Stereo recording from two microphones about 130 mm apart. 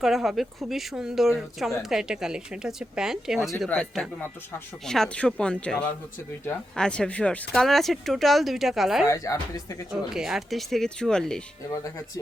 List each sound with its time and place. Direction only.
0.0 s speech: centre (ahead or behind)
9.0 s speech: 25° left (ahead or behind)
9.9 s speech: 5° right (ahead or behind)